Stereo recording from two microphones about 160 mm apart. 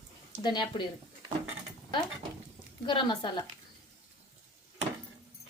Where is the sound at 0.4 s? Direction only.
30° left (ahead or behind).